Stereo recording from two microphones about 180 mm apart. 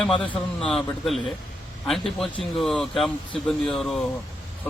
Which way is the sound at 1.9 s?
5° left (ahead or behind).